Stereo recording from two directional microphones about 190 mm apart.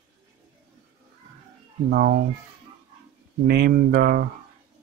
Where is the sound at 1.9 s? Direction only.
55° right (ahead or behind).